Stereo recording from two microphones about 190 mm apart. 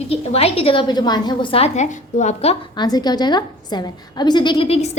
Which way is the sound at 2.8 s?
20° left (ahead or behind).